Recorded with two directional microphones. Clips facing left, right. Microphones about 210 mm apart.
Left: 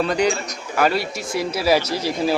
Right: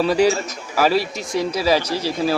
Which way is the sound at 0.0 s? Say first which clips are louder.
Right 3 dB; 5° right (ahead or behind).